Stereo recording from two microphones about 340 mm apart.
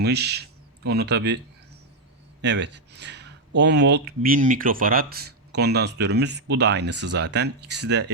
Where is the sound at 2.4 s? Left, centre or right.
Right.